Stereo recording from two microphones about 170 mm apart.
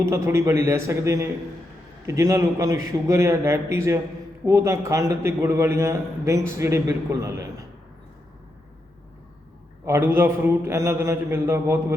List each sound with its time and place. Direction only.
0.0 s a man's voice: 15° right (ahead or behind)
9.8 s a man's voice: 15° right (ahead or behind)